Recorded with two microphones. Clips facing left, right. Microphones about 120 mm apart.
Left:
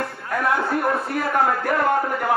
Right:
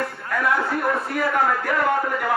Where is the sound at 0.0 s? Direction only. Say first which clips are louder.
Even; 30° left (ahead or behind).